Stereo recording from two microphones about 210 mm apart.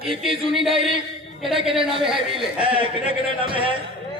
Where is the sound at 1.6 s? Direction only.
25° right (ahead or behind).